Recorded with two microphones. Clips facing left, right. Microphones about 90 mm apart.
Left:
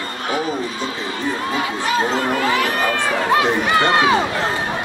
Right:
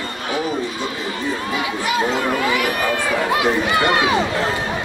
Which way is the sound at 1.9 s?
35° left (ahead or behind).